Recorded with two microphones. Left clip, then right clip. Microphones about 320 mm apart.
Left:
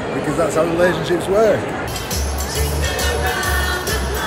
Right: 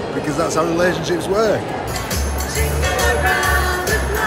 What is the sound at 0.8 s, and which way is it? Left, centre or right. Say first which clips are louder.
Speech: left 1 dB; centre.